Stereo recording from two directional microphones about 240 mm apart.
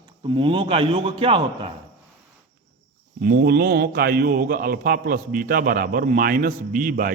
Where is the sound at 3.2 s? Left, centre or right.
Right.